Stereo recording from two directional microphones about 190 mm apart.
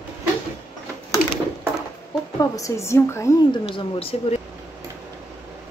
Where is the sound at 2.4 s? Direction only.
20° left (ahead or behind).